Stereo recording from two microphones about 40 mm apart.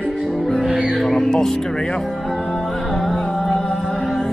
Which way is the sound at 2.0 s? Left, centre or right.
Centre.